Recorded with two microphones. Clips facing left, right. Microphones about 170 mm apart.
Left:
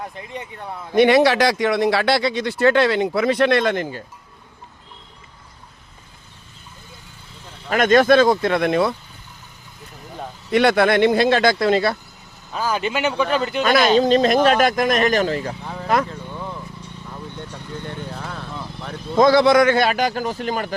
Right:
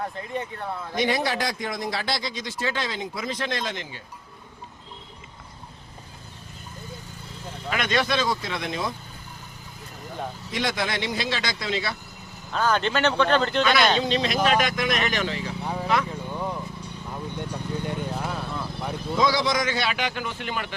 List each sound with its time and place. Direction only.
0.9 s speech: 75° left (ahead or behind); by 4.0 s 50° left (ahead or behind)
7.7 s speech: 45° left (ahead or behind); by 9.0 s 65° left (ahead or behind)
10.5 s speech: 60° left (ahead or behind)
12.5 s speech: 5° left (ahead or behind)
13.6 s speech: 45° left (ahead or behind)
15.6 s vehicle: 10° right (ahead or behind)
18.8 s a sound: 10° right (ahead or behind)
19.1 s speech: 55° left (ahead or behind)